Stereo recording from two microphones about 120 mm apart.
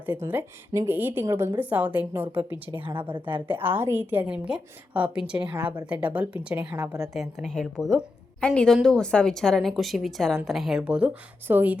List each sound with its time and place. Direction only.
0.0 s a woman's voice: 15° right (ahead or behind)
2.8 s a woman's voice: 45° right (ahead or behind)
3.5 s a woman's voice: 15° right (ahead or behind)
7.1 s a woman's voice: centre (ahead or behind)